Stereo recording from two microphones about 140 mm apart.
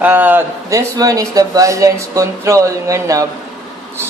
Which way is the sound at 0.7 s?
25° right (ahead or behind).